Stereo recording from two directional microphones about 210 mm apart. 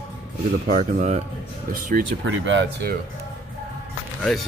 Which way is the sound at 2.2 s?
60° right (ahead or behind).